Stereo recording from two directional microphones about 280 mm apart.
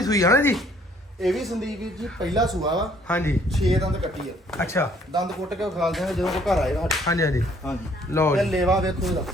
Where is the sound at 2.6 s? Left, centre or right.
Centre.